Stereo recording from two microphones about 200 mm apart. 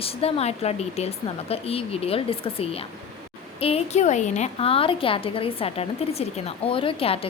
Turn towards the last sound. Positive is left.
turn(degrees=25)  # may be behind; listen again after turning